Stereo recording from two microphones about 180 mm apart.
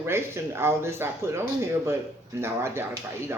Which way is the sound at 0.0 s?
15° right (ahead or behind).